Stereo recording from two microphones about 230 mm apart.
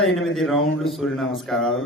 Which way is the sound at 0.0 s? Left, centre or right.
Centre.